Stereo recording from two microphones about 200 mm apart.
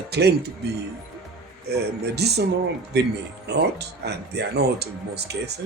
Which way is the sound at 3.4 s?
55° right (ahead or behind).